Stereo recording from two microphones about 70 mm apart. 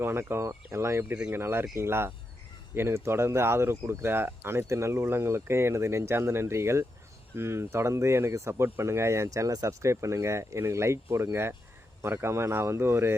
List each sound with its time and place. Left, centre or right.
0.0 s speech: right